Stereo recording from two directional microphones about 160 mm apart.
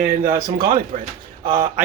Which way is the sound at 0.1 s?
60° right (ahead or behind).